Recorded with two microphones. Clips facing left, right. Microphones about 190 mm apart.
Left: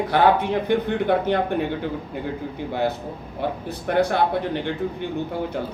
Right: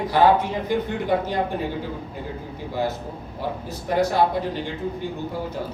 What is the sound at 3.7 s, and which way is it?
Speech, 60° left (ahead or behind).